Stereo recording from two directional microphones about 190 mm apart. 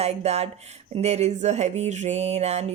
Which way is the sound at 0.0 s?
35° right (ahead or behind).